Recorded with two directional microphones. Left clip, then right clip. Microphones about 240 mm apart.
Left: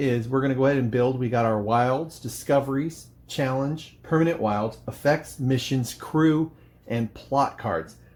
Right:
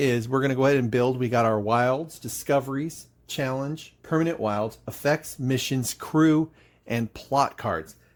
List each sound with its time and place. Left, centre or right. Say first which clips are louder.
0.0 s speech: right 1 dB; right